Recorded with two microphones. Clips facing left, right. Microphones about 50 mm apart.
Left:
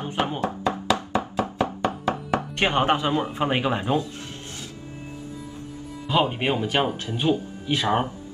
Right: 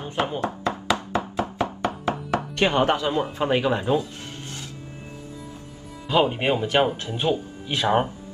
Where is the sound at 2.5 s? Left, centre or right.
Left.